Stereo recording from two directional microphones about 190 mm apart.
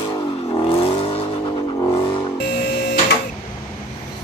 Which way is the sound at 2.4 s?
60° left (ahead or behind).